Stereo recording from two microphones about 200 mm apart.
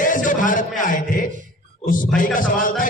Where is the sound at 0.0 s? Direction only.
40° left (ahead or behind).